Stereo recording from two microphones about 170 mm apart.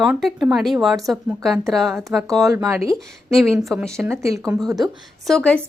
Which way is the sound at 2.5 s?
15° right (ahead or behind).